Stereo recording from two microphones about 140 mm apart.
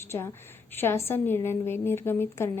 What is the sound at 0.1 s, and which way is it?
A woman's voice, 20° left (ahead or behind).